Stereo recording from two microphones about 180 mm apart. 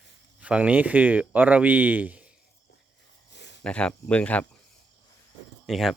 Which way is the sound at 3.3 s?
70° left (ahead or behind).